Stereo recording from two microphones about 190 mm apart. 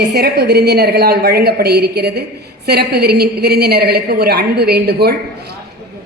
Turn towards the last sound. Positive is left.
turn(degrees=-55)  # may be behind; listen again after turning